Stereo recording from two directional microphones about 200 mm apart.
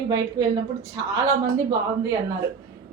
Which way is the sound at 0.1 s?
15° right (ahead or behind).